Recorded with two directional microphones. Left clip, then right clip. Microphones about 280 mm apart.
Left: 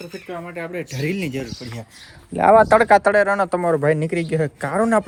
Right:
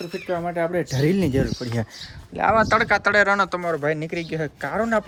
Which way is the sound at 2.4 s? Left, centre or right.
Centre.